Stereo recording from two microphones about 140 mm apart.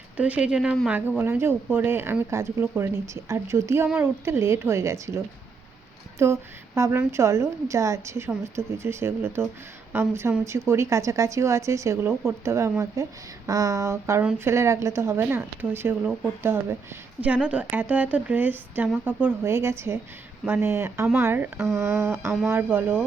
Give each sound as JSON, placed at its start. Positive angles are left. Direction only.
{"t": 0.2, "sound": "speech", "side_deg": -10}